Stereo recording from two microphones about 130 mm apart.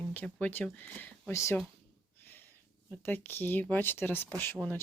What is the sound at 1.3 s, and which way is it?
Speech, 20° left (ahead or behind).